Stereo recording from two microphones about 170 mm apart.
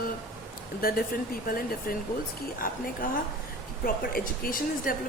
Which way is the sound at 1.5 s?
55° left (ahead or behind).